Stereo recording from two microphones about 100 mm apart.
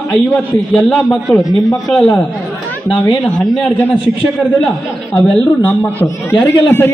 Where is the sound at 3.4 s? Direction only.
Centre (ahead or behind).